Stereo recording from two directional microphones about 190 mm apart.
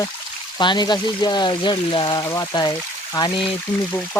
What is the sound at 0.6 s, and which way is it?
Speech, 25° left (ahead or behind).